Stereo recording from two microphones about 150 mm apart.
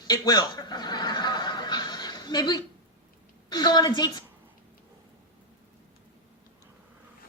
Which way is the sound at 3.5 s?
30° left (ahead or behind).